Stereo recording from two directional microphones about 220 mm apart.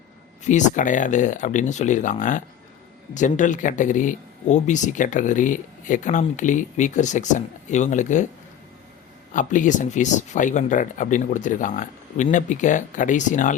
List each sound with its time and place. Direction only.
0.4 s speech: 35° left (ahead or behind)
9.3 s speech: 35° left (ahead or behind)